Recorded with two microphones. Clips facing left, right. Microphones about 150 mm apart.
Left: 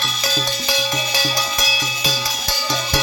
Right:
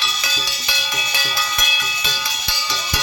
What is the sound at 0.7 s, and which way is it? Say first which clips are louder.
Music: left 5 dB; 35° left (ahead or behind).